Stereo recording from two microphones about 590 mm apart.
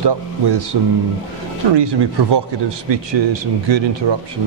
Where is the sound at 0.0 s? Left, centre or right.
Right.